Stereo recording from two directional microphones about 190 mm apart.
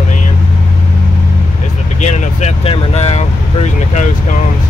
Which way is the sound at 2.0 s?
35° left (ahead or behind).